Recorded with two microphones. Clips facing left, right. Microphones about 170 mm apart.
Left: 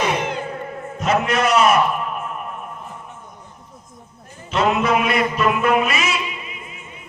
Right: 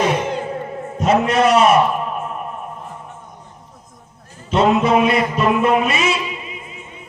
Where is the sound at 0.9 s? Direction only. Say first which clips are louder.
Right 4 dB; 30° right (ahead or behind).